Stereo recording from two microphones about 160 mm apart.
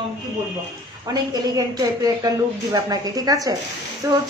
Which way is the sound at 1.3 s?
25° right (ahead or behind).